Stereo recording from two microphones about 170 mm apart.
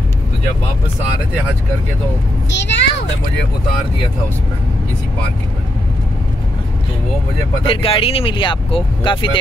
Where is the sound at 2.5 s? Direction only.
90° left.